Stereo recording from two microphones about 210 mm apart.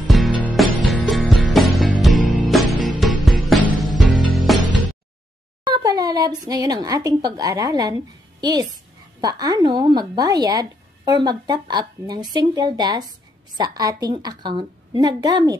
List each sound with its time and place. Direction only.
0.1 s music: centre (ahead or behind)
5.7 s speech: 20° right (ahead or behind)